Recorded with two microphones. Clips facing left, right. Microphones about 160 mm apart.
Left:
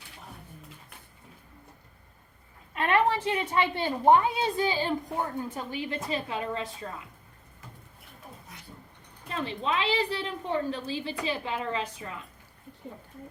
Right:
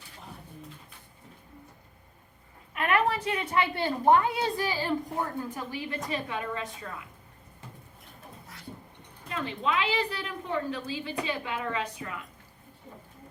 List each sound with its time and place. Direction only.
2.7 s a woman's voice: 30° left (ahead or behind)
9.3 s a woman's voice: 30° left (ahead or behind)